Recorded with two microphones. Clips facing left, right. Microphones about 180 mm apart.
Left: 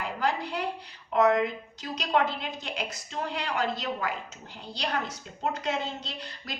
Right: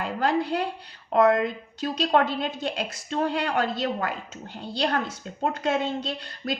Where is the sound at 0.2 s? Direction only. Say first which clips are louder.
Right 6 dB; 60° right (ahead or behind).